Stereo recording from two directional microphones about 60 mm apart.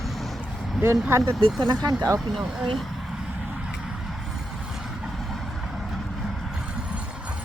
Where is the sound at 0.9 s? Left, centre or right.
Right.